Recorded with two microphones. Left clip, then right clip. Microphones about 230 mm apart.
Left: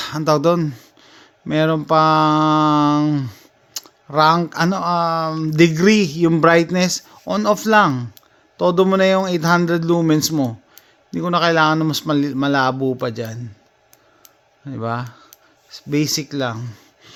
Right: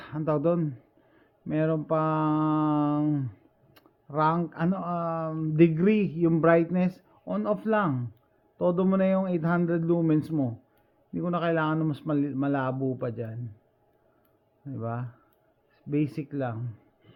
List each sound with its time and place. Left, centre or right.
0.0 s speech: left
14.7 s speech: left